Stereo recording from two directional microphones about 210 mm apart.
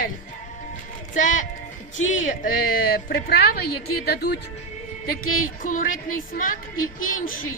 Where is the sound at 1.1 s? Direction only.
35° left (ahead or behind).